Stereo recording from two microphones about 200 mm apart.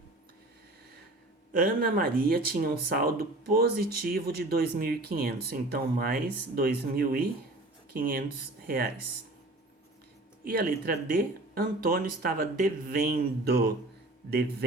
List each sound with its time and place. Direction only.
1.5 s speech: 45° right (ahead or behind)
10.4 s speech: 50° right (ahead or behind)